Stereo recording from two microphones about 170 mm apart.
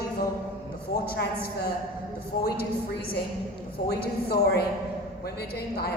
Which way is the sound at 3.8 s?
65° left (ahead or behind).